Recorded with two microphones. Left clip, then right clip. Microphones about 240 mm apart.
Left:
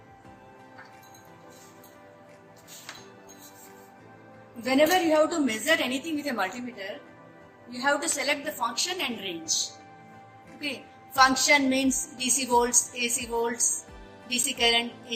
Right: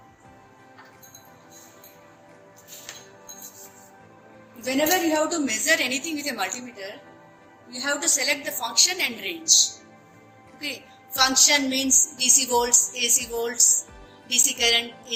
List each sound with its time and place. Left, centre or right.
4.6 s a woman's voice: left
10.6 s a woman's voice: left